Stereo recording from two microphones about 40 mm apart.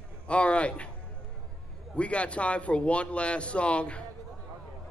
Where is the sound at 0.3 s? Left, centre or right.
Left.